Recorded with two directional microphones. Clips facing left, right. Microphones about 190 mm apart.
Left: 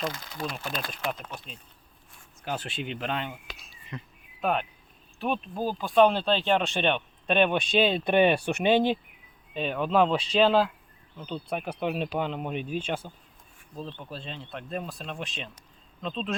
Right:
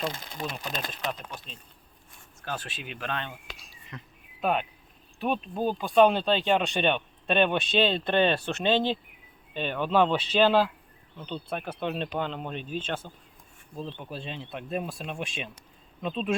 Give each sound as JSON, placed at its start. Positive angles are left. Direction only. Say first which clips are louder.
{"t": 0.0, "sound": "speech", "louder": "even", "side_deg": -25}
{"t": 1.2, "sound": "speech", "louder": "left 1 dB", "side_deg": 5}
{"t": 2.4, "sound": "speech", "louder": "left 3 dB", "side_deg": 20}
{"t": 3.9, "sound": "insect", "louder": "left 4 dB", "side_deg": 0}
{"t": 5.2, "sound": "speech", "louder": "right 1 dB", "side_deg": 0}
{"t": 7.3, "sound": "speech", "louder": "left 1 dB", "side_deg": 5}
{"t": 9.6, "sound": "speech", "louder": "even", "side_deg": 0}
{"t": 13.7, "sound": "speech", "louder": "right 1 dB", "side_deg": -15}